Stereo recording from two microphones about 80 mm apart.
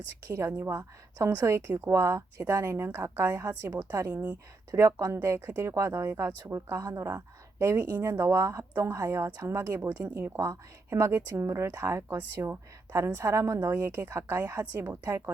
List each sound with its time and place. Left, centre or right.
0.3 s speech: right
3.0 s a woman's voice: right
3.3 s speech: right